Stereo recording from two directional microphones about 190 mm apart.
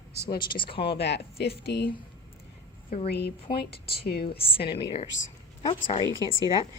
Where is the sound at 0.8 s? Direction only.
60° left (ahead or behind).